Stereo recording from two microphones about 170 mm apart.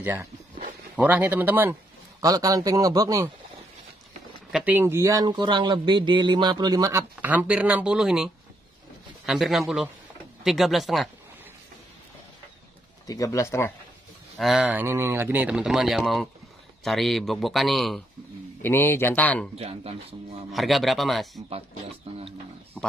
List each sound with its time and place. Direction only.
0.0 s a man's voice: 10° right (ahead or behind)
4.5 s speech: 5° right (ahead or behind)
13.0 s speech: 20° left (ahead or behind)
14.4 s speech: 5° right (ahead or behind)
18.6 s speech: 15° left (ahead or behind)
19.5 s speech: 35° right (ahead or behind)
20.5 s speech: centre (ahead or behind)